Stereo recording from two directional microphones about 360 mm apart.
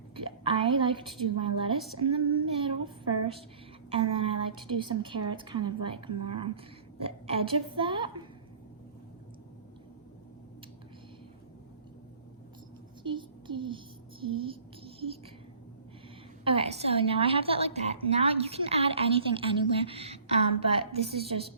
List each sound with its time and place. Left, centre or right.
0.3 s a woman's voice: centre
13.0 s a sound: centre
16.4 s a woman's voice: centre